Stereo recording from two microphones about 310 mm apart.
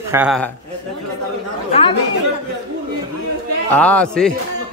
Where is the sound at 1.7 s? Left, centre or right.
Centre.